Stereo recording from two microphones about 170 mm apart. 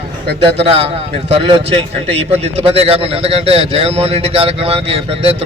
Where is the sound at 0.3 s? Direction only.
35° right (ahead or behind).